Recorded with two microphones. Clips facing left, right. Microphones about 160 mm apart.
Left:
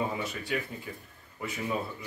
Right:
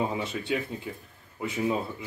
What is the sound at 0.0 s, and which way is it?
Speech, 25° right (ahead or behind).